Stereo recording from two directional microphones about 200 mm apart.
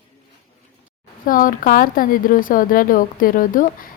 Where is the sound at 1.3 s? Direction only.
45° left (ahead or behind).